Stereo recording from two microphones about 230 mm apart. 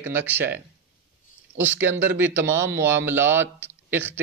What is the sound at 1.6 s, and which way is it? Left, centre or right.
Speech, centre.